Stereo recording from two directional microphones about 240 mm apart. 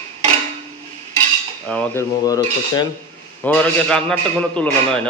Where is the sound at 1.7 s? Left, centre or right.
Centre.